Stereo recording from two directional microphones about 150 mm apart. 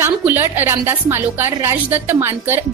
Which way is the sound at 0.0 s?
15° right (ahead or behind).